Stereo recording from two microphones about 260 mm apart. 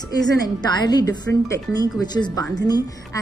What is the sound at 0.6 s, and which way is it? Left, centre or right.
A woman's voice, centre.